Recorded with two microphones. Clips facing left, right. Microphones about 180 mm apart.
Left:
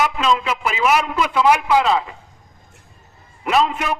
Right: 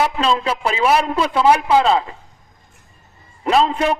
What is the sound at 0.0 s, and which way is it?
A man's voice, 30° right (ahead or behind).